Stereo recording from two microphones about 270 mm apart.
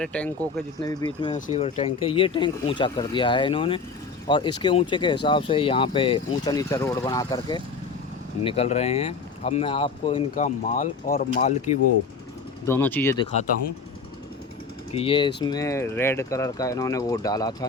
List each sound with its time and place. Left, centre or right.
0.0 s speech: centre
0.8 s speech: centre
12.6 s speech: centre
14.9 s speech: centre